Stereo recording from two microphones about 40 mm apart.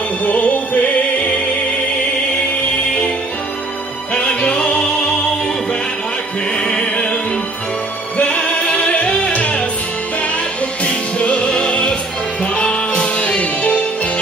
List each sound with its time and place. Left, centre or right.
0.2 s music: left
4.1 s music: left
6.6 s music: left
8.2 s music: left
10.8 s music: left